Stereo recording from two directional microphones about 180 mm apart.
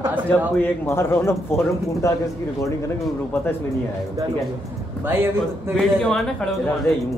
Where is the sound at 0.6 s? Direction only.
15° left (ahead or behind).